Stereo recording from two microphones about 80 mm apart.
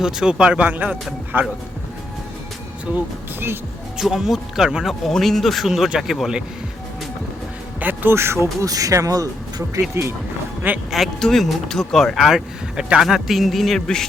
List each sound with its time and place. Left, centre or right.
0.0 s speech: centre
3.9 s speech: centre
7.8 s speech: right
9.9 s speech: right
10.9 s speech: centre